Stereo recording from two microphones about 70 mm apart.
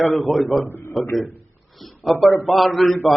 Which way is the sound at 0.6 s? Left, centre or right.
Left.